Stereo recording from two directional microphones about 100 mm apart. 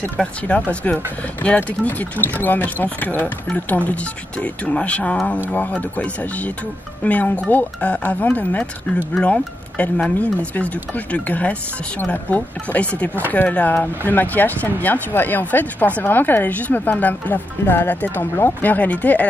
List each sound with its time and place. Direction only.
0.2 s a woman's voice: 10° left (ahead or behind)